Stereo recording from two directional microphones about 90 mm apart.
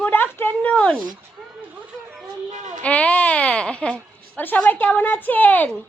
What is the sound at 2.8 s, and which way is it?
Speech, 15° left (ahead or behind).